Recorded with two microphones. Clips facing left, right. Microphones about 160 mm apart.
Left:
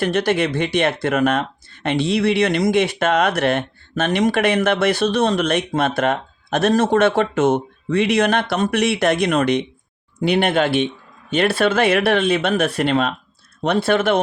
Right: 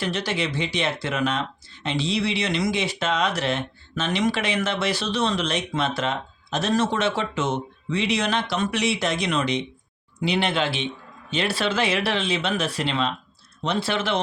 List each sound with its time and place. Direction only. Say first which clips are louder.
0.0 s speech: left 8 dB; 55° left (ahead or behind)